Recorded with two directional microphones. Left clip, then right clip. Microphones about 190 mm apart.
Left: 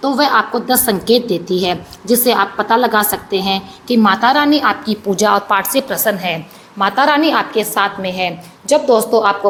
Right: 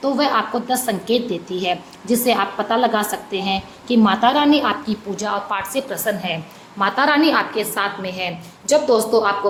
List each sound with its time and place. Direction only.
0.0 s a woman's voice: 20° left (ahead or behind)